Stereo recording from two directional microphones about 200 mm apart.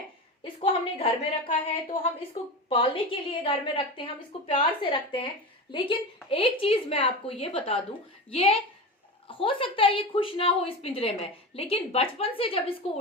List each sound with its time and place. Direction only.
0.4 s a woman's voice: 25° left (ahead or behind)
2.6 s a woman's voice: 25° left (ahead or behind)